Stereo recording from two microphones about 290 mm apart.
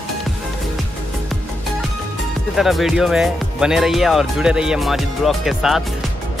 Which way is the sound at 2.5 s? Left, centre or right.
Centre.